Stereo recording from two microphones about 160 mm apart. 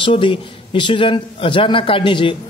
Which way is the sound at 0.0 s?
30° left (ahead or behind).